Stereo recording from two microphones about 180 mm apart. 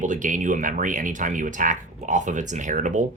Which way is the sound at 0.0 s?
45° right (ahead or behind).